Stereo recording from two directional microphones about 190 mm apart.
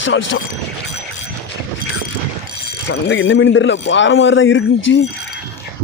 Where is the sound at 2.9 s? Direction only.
85° left.